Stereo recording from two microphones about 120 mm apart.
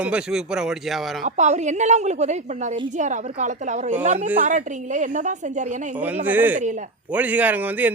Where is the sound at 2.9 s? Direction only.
90° right.